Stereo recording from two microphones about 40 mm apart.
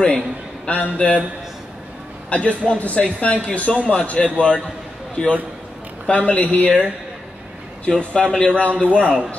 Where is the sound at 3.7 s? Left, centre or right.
Centre.